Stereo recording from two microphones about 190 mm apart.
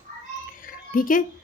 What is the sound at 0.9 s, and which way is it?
Speech, 45° left (ahead or behind).